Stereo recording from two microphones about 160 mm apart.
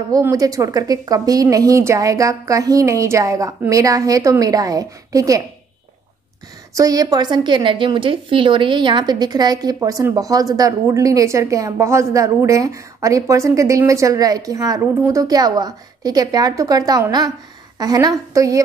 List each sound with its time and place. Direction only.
0.1 s a woman's voice: 20° right (ahead or behind)
6.7 s a woman's voice: 20° right (ahead or behind)